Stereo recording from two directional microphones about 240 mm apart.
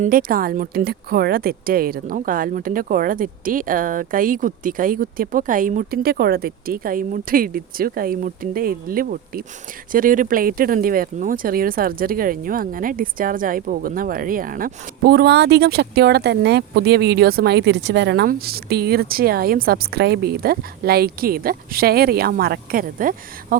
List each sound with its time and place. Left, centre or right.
0.0 s speech: right